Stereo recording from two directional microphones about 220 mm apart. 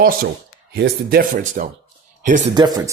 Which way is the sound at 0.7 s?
45° right (ahead or behind).